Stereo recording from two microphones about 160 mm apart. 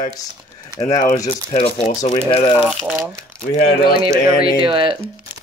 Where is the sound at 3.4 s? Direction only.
75° left (ahead or behind).